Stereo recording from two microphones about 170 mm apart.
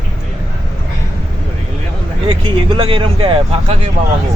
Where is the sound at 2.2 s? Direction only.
30° right (ahead or behind).